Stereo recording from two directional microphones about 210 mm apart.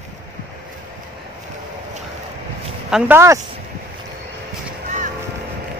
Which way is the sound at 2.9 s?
10° right (ahead or behind).